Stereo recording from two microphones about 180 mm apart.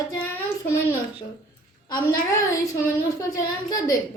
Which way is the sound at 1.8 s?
20° left (ahead or behind).